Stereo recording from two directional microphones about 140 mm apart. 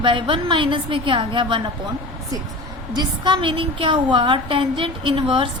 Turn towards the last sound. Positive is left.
turn(degrees=-40)  # may be behind; listen again after turning